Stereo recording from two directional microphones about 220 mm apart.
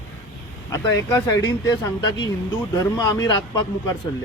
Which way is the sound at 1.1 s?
15° left (ahead or behind).